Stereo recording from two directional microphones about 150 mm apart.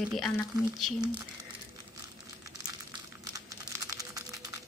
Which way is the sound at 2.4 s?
25° right (ahead or behind).